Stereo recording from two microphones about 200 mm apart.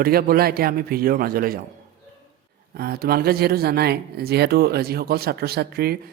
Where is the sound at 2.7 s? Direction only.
50° right (ahead or behind).